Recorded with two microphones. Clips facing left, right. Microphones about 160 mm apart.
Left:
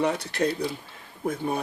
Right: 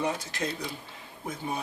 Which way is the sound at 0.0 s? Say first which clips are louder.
Left 6 dB; 65° left (ahead or behind).